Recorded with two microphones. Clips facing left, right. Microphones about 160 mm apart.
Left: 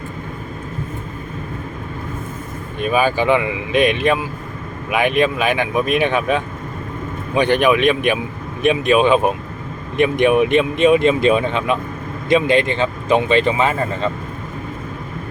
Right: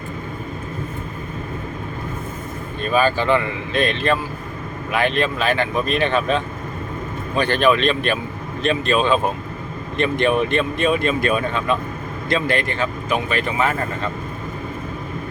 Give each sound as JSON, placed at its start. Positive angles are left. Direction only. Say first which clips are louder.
{"t": 2.8, "sound": "speech", "louder": "left 2 dB", "side_deg": 15}